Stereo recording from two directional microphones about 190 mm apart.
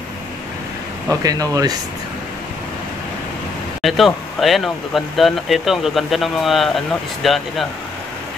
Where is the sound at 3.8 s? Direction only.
Centre (ahead or behind).